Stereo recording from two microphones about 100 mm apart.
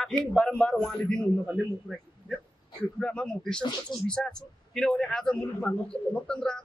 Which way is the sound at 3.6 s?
50° left (ahead or behind).